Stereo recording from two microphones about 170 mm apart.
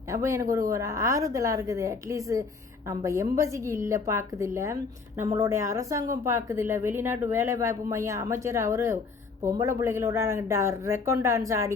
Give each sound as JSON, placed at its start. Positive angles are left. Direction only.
{"t": 0.1, "sound": "a woman's voice", "side_deg": -15}